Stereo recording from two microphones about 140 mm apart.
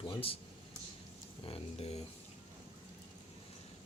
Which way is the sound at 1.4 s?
45° left (ahead or behind).